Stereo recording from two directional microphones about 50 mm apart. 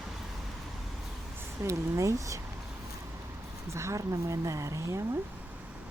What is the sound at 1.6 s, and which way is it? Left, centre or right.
Speech, right.